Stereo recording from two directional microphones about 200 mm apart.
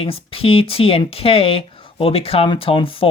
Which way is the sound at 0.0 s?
30° left (ahead or behind).